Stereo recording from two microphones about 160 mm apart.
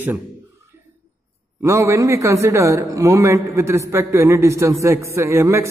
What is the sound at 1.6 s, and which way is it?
A man's voice, 15° right (ahead or behind).